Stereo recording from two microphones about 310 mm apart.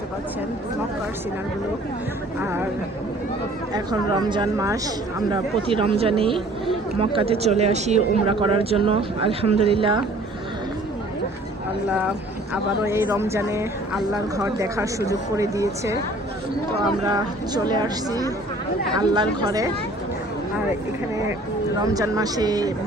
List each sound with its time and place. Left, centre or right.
2.4 s speech: centre
3.7 s speech: centre
12.8 s speech: centre
17.1 s speech: centre
21.8 s speech: centre